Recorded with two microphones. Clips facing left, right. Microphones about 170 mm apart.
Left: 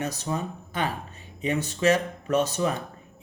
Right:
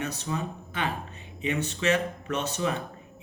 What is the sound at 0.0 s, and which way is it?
Speech, 40° left (ahead or behind).